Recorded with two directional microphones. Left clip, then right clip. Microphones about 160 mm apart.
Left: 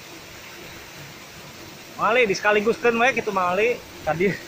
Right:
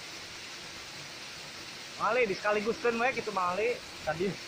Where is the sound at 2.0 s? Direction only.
35° left (ahead or behind).